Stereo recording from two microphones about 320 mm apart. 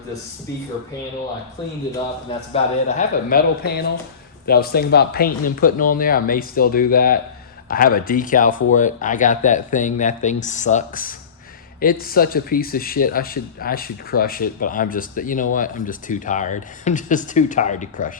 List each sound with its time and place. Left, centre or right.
2.5 s speech: left